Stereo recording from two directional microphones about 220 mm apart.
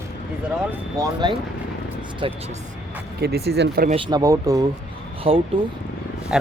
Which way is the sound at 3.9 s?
20° right (ahead or behind).